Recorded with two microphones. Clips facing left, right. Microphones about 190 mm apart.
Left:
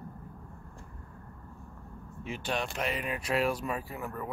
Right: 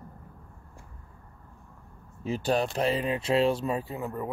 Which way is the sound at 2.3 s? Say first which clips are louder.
Right 8 dB; 35° right (ahead or behind).